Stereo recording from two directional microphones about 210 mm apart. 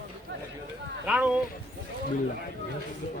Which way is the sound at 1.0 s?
5° right (ahead or behind).